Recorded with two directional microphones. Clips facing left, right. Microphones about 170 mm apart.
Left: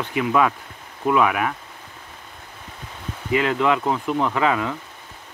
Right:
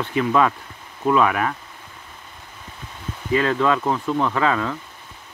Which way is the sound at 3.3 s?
15° left (ahead or behind).